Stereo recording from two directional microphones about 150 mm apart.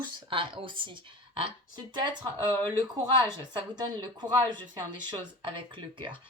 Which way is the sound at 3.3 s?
30° right (ahead or behind).